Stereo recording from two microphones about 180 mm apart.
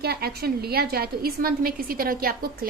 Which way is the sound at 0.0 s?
60° right (ahead or behind).